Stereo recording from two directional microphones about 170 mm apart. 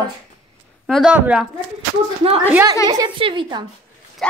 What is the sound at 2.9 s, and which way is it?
Speech, 25° right (ahead or behind).